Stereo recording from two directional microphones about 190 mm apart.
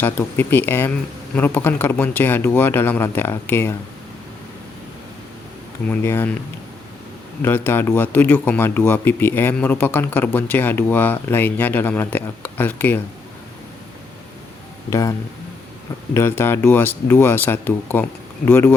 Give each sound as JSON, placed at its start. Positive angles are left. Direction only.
{"t": 0.0, "sound": "speech", "side_deg": 10}
{"t": 5.9, "sound": "speech", "side_deg": 10}
{"t": 7.4, "sound": "speech", "side_deg": 10}
{"t": 14.8, "sound": "speech", "side_deg": 15}
{"t": 16.1, "sound": "speech", "side_deg": 10}